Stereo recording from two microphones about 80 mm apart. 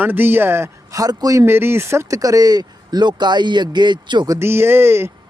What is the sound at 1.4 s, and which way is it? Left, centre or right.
Speech, right.